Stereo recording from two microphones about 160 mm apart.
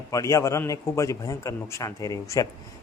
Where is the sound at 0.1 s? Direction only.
20° left (ahead or behind).